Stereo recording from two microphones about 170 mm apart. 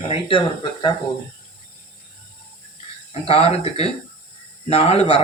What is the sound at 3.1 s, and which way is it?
Speech, 35° left (ahead or behind).